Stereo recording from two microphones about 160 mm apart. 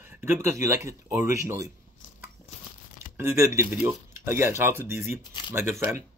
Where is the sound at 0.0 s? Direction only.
15° right (ahead or behind).